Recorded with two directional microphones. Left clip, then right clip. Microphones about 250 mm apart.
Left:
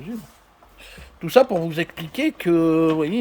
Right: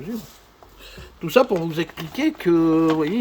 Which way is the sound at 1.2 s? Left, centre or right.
Centre.